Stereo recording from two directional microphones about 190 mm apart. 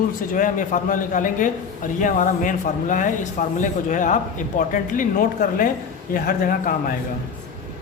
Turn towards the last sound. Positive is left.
turn(degrees=50)  # may be behind; listen again after turning